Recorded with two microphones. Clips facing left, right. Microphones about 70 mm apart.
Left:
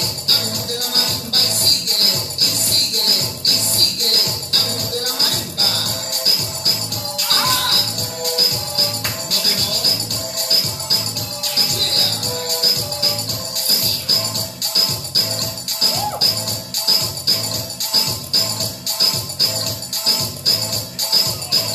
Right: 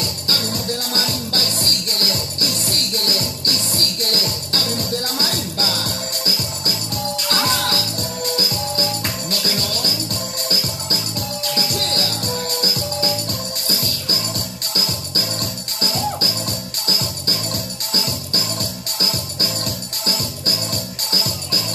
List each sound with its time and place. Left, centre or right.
0.3 s music: right
18.9 s music: right